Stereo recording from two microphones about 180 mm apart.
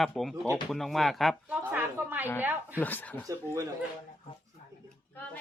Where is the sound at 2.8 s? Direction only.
10° left (ahead or behind).